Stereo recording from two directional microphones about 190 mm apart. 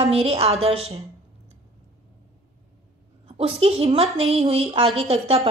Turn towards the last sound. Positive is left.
turn(degrees=-30)  # may be behind; listen again after turning